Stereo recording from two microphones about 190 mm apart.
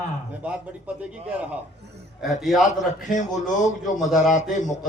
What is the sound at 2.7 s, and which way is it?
A man's voice, 40° left (ahead or behind).